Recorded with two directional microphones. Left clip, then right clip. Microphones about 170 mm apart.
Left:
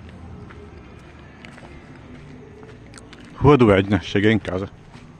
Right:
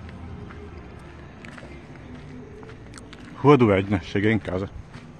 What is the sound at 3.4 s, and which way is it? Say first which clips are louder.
Speech: left 3 dB; 20° left (ahead or behind).